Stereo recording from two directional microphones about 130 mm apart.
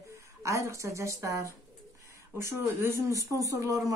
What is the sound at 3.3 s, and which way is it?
Speech, 25° right (ahead or behind).